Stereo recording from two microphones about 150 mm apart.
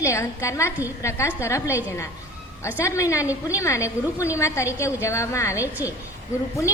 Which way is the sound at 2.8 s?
20° left (ahead or behind).